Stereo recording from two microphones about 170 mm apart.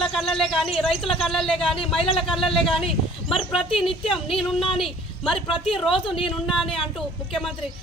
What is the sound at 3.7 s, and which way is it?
Speech, 30° left (ahead or behind).